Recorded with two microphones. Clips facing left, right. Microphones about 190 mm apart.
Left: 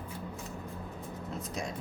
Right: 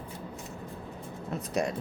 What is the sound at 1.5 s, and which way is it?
Speech, 65° right (ahead or behind).